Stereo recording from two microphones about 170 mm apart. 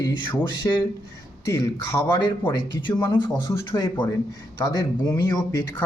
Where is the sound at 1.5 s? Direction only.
20° left (ahead or behind).